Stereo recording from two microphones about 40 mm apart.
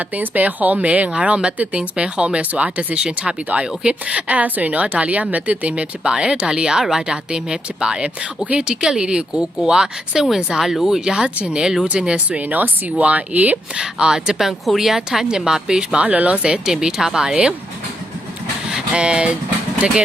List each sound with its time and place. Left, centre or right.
0.0 s speech: right
6.0 s speech: right
12.4 s speech: right
13.0 s speech: right
13.7 s speech: centre
14.3 s speech: centre
16.0 s speech: right
16.4 s speech: centre
18.9 s speech: right